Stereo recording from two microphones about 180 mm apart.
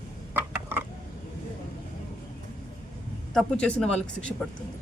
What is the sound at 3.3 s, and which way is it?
A man's voice, 5° left (ahead or behind).